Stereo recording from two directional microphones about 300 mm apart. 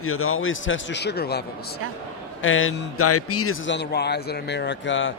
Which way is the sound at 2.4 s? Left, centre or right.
Left.